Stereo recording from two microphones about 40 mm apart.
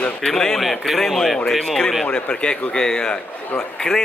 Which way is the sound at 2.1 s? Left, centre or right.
Left.